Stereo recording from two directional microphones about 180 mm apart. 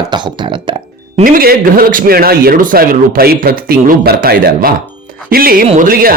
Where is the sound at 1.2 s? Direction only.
55° right (ahead or behind).